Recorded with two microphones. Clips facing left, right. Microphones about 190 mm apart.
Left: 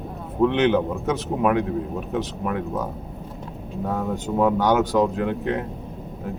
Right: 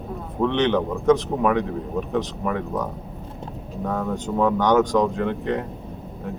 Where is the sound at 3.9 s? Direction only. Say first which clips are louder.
Even; 10° left (ahead or behind).